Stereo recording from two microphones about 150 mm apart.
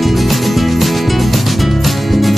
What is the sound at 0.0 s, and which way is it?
Music, centre (ahead or behind).